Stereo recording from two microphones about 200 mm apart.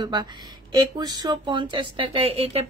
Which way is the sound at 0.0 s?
20° right (ahead or behind).